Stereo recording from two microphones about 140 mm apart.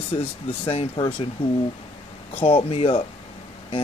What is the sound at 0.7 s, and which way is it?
Speech, 45° left (ahead or behind).